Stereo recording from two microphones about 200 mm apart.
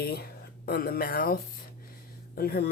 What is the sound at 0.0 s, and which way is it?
A woman's voice, 50° left (ahead or behind).